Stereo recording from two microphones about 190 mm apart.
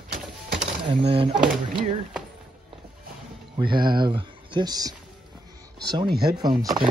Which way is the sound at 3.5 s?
25° right (ahead or behind).